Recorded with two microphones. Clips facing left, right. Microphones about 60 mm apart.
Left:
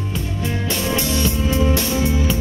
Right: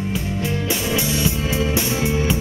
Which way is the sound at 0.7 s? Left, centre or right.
Centre.